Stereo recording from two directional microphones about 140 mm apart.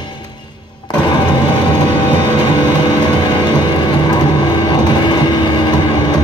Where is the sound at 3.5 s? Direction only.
35° left (ahead or behind).